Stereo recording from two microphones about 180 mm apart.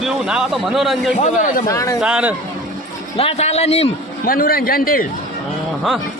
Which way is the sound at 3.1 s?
35° left (ahead or behind).